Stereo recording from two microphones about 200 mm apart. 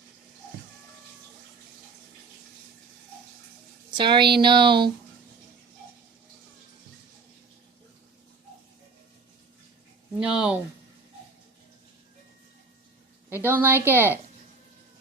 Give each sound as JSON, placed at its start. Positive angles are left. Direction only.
{"t": 3.9, "sound": "a woman's voice", "side_deg": -25}
{"t": 10.2, "sound": "speech", "side_deg": -5}
{"t": 13.3, "sound": "a woman's voice", "side_deg": -10}